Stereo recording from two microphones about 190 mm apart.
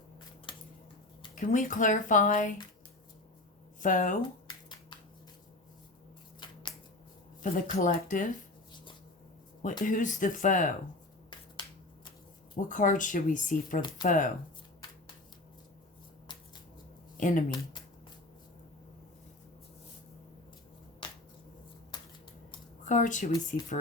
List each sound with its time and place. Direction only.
0.5 s a sound: 25° left (ahead or behind)
1.4 s speech: 45° left (ahead or behind)
3.8 s speech: 45° left (ahead or behind)
6.4 s shuffling cards: 25° left (ahead or behind)
7.5 s speech: 45° left (ahead or behind)
8.7 s a sound: 25° left (ahead or behind)
9.8 s speech: 45° left (ahead or behind)
12.6 s speech: 45° left (ahead or behind)
17.2 s speech: 45° left (ahead or behind)
21.0 s shuffling cards: 25° left (ahead or behind)
21.9 s a sound: 25° left (ahead or behind)
22.8 s speech: 40° left (ahead or behind)